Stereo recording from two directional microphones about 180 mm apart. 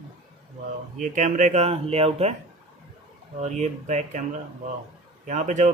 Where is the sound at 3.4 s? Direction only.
40° right (ahead or behind).